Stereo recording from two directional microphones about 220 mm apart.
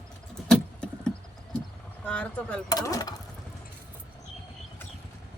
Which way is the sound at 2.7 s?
15° left (ahead or behind).